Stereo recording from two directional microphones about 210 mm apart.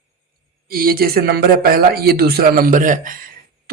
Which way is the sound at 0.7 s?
45° right (ahead or behind).